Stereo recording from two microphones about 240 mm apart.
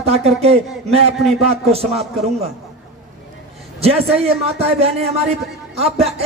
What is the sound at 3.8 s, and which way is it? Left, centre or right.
A man's voice, right.